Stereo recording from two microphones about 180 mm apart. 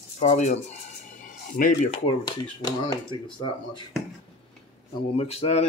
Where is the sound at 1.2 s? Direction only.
50° left (ahead or behind).